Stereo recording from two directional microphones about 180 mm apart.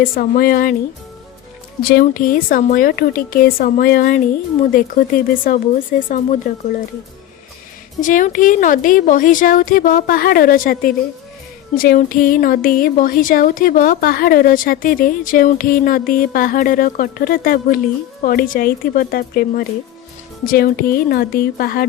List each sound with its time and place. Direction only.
0.0 s speech: 55° left (ahead or behind)
1.9 s speech: 55° left (ahead or behind)
8.0 s speech: 45° left (ahead or behind)